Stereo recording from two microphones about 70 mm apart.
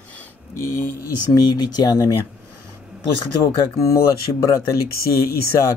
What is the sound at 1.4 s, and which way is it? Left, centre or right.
Speech, left.